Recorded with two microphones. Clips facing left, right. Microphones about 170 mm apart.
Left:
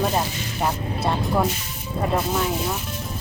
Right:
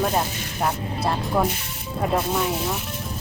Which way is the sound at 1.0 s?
Centre (ahead or behind).